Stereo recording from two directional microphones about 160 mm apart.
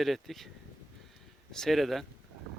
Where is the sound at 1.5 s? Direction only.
Centre (ahead or behind).